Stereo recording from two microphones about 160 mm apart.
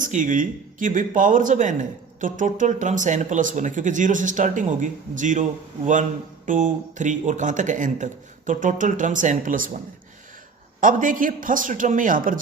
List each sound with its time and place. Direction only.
0.0 s speech: 55° right (ahead or behind)
10.8 s speech: 55° right (ahead or behind)